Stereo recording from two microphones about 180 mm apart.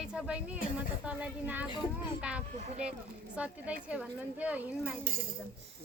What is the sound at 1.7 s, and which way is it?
Speech, 25° left (ahead or behind).